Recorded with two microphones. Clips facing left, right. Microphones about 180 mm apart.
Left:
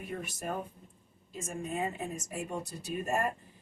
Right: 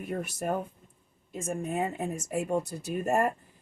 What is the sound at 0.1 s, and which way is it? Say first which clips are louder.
A woman's voice: right 6 dB; 50° right (ahead or behind).